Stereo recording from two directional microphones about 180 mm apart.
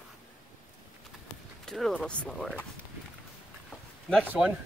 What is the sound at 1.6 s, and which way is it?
Speech, 5° left (ahead or behind).